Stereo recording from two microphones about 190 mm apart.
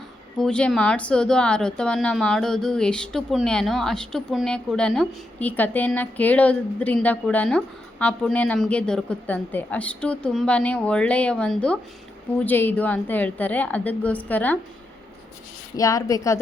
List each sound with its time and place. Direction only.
0.3 s a woman's voice: 5° left (ahead or behind)
15.7 s a woman's voice: 20° left (ahead or behind)